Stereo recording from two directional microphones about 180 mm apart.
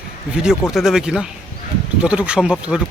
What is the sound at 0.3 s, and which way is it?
Speech, 5° right (ahead or behind).